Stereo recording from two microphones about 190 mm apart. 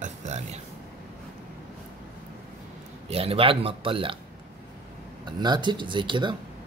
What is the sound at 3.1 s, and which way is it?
Speech, 30° right (ahead or behind).